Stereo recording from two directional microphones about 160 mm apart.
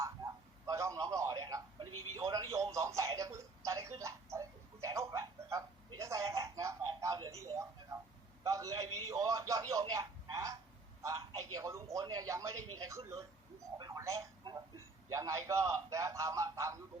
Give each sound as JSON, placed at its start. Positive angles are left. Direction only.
{"t": 0.7, "sound": "television", "side_deg": -20}
{"t": 8.4, "sound": "a man's voice", "side_deg": -20}
{"t": 11.0, "sound": "a sound", "side_deg": -20}
{"t": 11.3, "sound": "a man's voice", "side_deg": -20}